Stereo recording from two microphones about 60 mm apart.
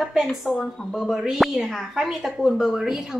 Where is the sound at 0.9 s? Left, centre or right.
Centre.